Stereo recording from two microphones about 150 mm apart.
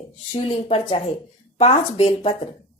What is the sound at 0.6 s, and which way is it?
A woman's voice, 40° left (ahead or behind).